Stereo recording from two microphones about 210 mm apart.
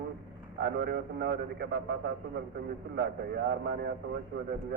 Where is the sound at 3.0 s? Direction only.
50° right (ahead or behind).